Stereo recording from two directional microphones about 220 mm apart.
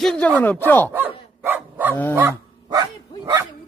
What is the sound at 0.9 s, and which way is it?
Dog, 10° right (ahead or behind).